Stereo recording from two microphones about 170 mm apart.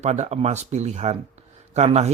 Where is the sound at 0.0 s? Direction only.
40° right (ahead or behind).